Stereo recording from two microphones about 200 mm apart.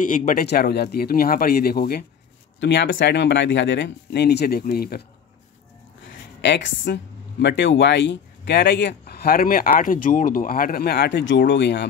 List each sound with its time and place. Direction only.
0.0 s speech: 40° left (ahead or behind)
2.6 s speech: 65° left (ahead or behind)
6.4 s speech: 60° left (ahead or behind)